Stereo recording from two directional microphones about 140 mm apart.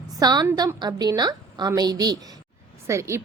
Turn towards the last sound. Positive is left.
turn(degrees=-20)  # may be behind; listen again after turning